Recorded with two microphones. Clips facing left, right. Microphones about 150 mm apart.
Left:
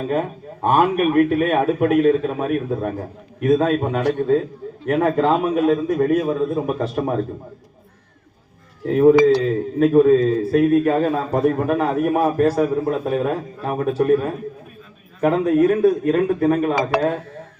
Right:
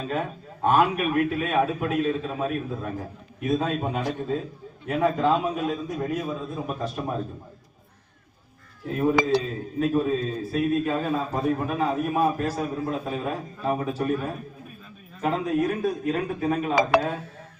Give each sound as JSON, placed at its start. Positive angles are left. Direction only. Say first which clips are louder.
{"t": 0.1, "sound": "a man's voice", "louder": "left 7 dB", "side_deg": 50}
{"t": 8.9, "sound": "a man's voice", "louder": "left 10 dB", "side_deg": 65}
{"t": 15.2, "sound": "a man's voice", "louder": "left 8 dB", "side_deg": 60}